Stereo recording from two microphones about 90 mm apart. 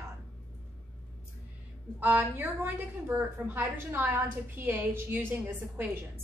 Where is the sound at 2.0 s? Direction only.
20° right (ahead or behind).